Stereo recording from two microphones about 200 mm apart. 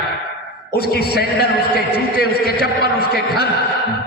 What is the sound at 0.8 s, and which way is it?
A man's voice, 50° left (ahead or behind).